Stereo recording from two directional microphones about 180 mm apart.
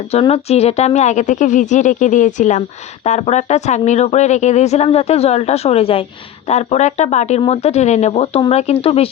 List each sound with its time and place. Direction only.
0.1 s a woman's voice: 35° left (ahead or behind)